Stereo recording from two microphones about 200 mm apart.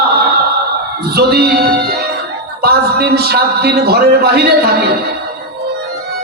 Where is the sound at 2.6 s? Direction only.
50° right (ahead or behind).